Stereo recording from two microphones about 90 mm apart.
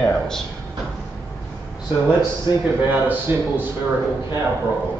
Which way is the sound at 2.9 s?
20° right (ahead or behind).